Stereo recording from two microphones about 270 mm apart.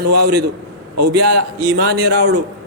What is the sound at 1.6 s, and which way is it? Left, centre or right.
Speech, right.